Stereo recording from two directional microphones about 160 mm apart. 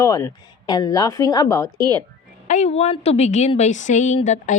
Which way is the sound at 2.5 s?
45° left (ahead or behind).